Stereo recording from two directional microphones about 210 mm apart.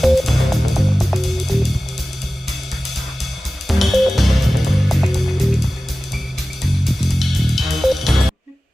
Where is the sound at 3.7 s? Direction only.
Centre (ahead or behind).